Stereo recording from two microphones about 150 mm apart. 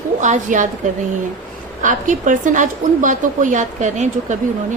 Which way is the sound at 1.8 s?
60° right (ahead or behind).